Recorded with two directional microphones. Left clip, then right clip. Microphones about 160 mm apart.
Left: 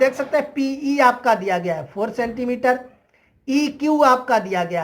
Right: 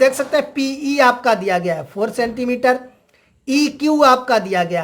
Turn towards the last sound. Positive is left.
turn(degrees=-35)  # may be behind; listen again after turning